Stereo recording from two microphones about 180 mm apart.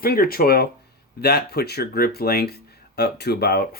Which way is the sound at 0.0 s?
55° left (ahead or behind).